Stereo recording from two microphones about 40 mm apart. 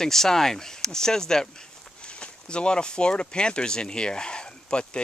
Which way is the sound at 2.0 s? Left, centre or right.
Left.